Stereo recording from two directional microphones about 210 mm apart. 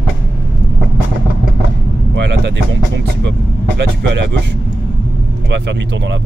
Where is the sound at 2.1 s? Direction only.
55° right (ahead or behind).